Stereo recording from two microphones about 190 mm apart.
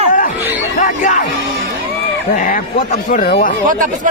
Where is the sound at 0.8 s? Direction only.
45° left (ahead or behind).